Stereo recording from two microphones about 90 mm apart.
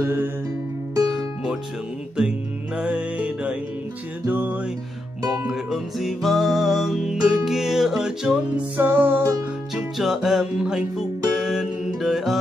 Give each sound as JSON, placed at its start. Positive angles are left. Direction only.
{"t": 0.0, "sound": "music", "side_deg": -25}
{"t": 1.0, "sound": "music", "side_deg": -5}
{"t": 5.5, "sound": "music", "side_deg": -5}
{"t": 8.7, "sound": "music", "side_deg": -25}
{"t": 9.8, "sound": "music", "side_deg": -5}